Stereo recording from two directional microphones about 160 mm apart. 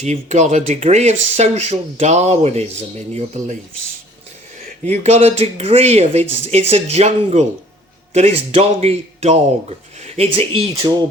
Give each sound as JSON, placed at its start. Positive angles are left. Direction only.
{"t": 0.0, "sound": "speech", "side_deg": -45}
{"t": 4.9, "sound": "speech", "side_deg": -40}